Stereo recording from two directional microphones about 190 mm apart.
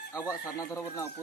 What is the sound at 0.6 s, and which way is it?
Speech, 15° left (ahead or behind).